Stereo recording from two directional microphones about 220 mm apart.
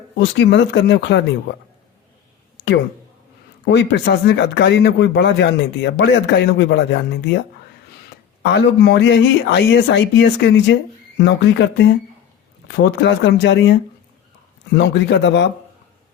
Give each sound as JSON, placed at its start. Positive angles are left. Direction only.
{"t": 0.2, "sound": "speech", "side_deg": 55}
{"t": 3.7, "sound": "speech", "side_deg": 55}
{"t": 8.4, "sound": "speech", "side_deg": 50}
{"t": 14.8, "sound": "speech", "side_deg": 55}